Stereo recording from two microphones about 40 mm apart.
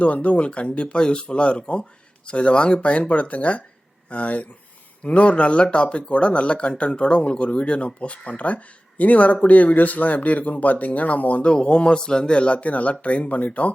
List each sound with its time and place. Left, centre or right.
0.0 s speech: left
11.4 s speech: left